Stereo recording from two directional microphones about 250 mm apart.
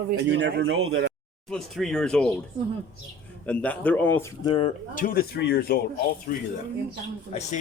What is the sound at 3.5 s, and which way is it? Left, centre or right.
A man's voice, centre.